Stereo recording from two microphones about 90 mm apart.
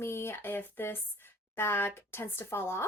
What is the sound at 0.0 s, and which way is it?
Speech, 30° left (ahead or behind).